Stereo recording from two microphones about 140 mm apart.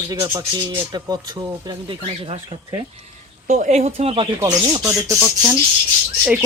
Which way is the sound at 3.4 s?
55° right (ahead or behind).